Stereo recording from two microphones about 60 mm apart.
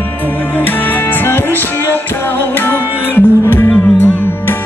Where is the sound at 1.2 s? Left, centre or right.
Left.